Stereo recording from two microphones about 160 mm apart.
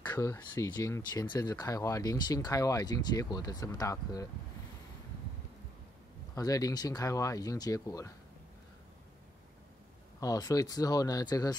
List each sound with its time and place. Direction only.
0.1 s speech: 20° left (ahead or behind)
6.3 s speech: 20° left (ahead or behind)
10.2 s speech: 20° left (ahead or behind)